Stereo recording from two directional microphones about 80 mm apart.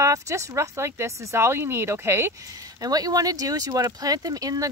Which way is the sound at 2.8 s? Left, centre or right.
Right.